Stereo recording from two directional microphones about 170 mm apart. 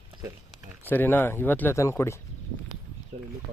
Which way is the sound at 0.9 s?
10° left (ahead or behind).